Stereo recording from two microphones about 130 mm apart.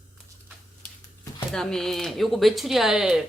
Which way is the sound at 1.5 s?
5° left (ahead or behind).